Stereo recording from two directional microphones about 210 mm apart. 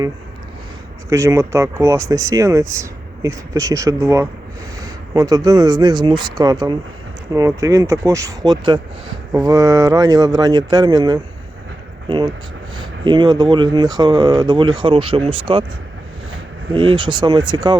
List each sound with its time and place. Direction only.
1.1 s speech: 15° right (ahead or behind)
16.9 s speech: 20° right (ahead or behind)